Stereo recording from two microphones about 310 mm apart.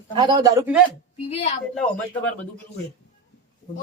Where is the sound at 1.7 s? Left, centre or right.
Centre.